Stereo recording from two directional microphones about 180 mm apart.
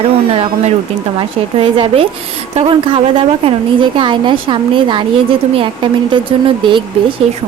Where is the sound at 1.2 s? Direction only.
30° right (ahead or behind).